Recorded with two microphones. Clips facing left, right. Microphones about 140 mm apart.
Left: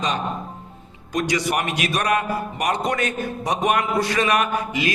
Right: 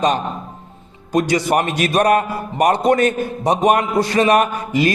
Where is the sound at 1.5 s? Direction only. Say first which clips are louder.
Right 6 dB; 40° right (ahead or behind).